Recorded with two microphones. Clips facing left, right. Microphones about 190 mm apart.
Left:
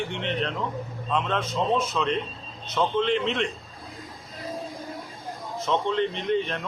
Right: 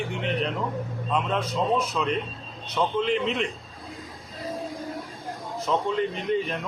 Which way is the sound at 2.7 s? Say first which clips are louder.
Left 1 dB; 5° right (ahead or behind).